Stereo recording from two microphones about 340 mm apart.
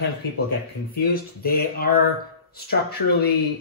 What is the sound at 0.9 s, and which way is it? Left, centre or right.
Speech, left.